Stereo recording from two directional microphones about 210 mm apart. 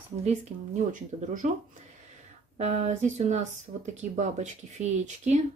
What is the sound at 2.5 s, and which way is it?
Speech, 30° right (ahead or behind).